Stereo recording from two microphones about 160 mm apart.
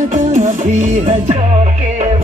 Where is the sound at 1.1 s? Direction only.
45° right (ahead or behind).